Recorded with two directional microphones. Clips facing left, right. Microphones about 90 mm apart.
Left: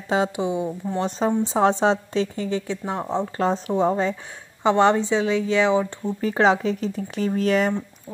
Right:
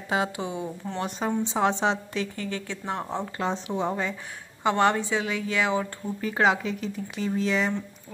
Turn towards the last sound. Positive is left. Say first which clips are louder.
# left 5 dB
turn(degrees=50)  # may be behind; listen again after turning